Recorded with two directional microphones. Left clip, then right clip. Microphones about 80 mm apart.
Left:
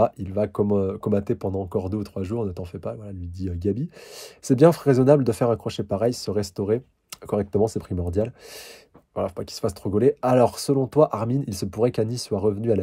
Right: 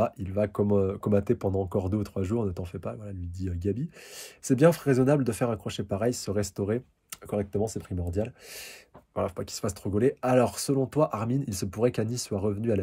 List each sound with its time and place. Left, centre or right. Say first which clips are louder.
0.0 s speech: left 5 dB; left
7.2 s speech: left 7 dB; left
9.1 s speech: left 3 dB; centre